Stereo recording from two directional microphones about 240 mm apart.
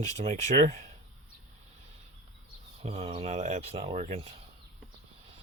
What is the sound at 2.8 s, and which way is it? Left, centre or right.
Speech, right.